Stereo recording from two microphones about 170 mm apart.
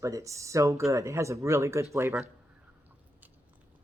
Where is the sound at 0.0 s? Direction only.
20° right (ahead or behind).